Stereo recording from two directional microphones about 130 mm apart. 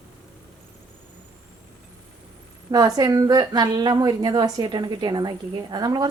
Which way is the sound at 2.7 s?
30° right (ahead or behind).